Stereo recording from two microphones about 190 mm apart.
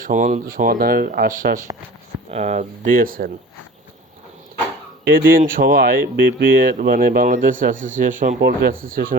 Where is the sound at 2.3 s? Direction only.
35° right (ahead or behind).